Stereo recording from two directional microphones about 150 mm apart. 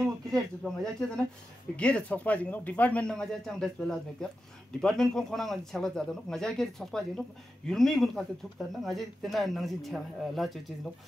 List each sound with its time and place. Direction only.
0.0 s speech: 20° right (ahead or behind)
0.7 s speech: 5° left (ahead or behind)